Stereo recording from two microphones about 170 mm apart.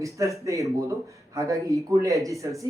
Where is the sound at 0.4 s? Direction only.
20° right (ahead or behind).